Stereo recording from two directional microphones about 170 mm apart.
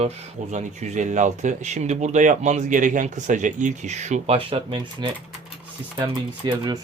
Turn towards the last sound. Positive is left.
turn(degrees=-25)  # may be behind; listen again after turning